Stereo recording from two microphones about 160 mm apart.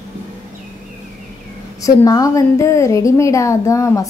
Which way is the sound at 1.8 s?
20° left (ahead or behind).